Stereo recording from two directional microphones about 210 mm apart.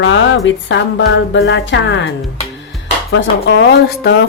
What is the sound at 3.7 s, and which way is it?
Speech, 50° left (ahead or behind).